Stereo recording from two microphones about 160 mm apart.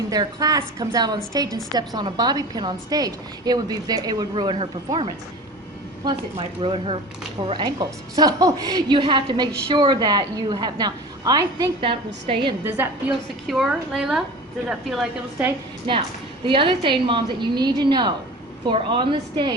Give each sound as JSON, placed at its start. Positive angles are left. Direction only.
{"t": 0.1, "sound": "a woman's voice", "side_deg": -25}
{"t": 12.6, "sound": "a woman's voice", "side_deg": -15}
{"t": 13.5, "sound": "a woman's voice", "side_deg": 0}
{"t": 16.5, "sound": "a woman's voice", "side_deg": -35}